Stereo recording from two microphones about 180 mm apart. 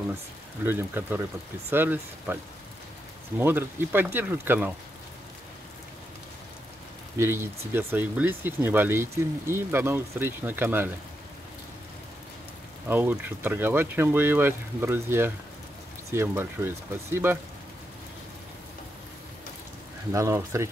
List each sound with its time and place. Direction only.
0.7 s speech: 10° right (ahead or behind)
3.3 s speech: 10° right (ahead or behind)
7.2 s speech: 15° right (ahead or behind)
12.8 s speech: 10° right (ahead or behind)
20.1 s speech: 15° right (ahead or behind)